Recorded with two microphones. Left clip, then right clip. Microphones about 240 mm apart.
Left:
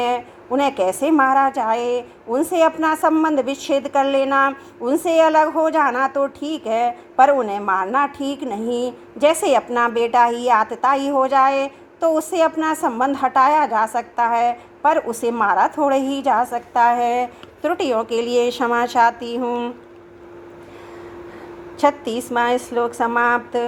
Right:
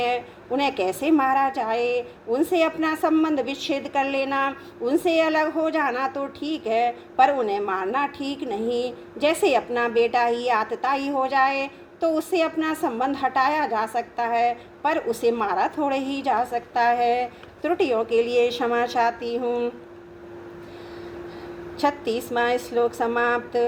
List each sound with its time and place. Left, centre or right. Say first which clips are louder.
0.0 s a woman's voice: left 4 dB; left
21.8 s a woman's voice: left 5 dB; left